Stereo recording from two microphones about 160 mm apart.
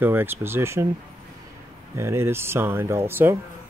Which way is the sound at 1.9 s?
15° right (ahead or behind).